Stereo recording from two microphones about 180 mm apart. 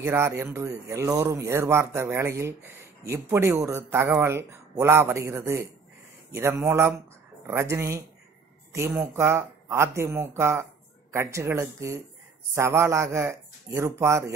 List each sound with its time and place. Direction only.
0.0 s speech: 15° right (ahead or behind)